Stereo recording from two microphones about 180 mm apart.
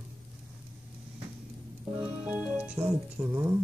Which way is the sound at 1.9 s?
10° right (ahead or behind).